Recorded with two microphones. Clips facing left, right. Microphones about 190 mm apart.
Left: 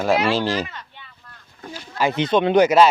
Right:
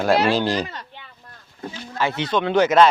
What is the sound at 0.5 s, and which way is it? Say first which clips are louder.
Speech: right 1 dB; 35° right (ahead or behind).